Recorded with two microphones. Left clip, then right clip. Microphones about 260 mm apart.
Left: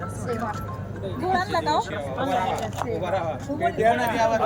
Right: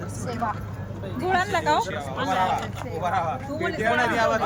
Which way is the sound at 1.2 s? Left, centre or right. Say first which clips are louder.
Right 1 dB; centre.